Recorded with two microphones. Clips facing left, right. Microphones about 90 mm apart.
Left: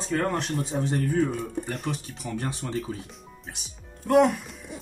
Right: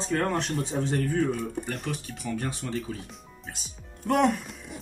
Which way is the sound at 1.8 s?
20° left (ahead or behind).